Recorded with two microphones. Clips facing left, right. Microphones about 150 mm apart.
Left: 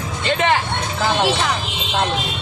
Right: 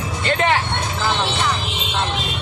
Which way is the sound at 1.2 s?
90° left.